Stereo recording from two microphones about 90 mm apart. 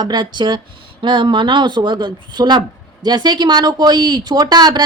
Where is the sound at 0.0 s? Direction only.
55° right (ahead or behind).